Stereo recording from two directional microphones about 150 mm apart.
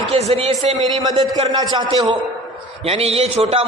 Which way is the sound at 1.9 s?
45° right (ahead or behind).